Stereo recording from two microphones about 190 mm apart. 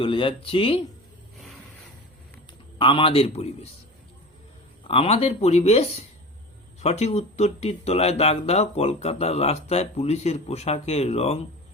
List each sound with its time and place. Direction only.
0.0 s speech: 25° left (ahead or behind)
2.7 s speech: 25° left (ahead or behind)
4.9 s speech: 30° left (ahead or behind)